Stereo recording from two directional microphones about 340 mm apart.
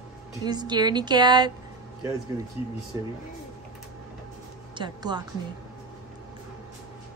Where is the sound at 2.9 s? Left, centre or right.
Centre.